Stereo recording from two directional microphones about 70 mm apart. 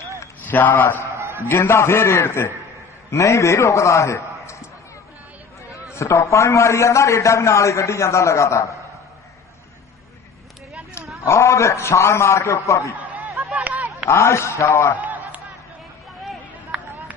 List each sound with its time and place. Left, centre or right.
0.4 s a man's voice: left
5.7 s a man's voice: left
11.2 s a man's voice: left
13.6 s a sound: right
14.1 s a man's voice: left
15.0 s a sound: right